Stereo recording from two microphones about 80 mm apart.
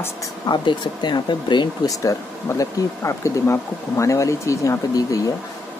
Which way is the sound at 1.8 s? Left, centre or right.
Left.